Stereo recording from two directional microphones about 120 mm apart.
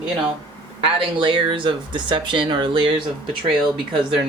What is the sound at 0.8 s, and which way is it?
Speech, 45° right (ahead or behind).